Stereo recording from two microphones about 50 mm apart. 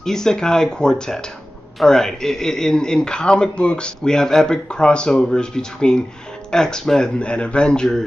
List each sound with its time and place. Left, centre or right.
0.0 s a man's voice: centre